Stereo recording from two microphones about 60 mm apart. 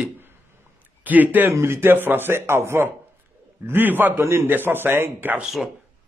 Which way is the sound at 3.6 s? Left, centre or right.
Right.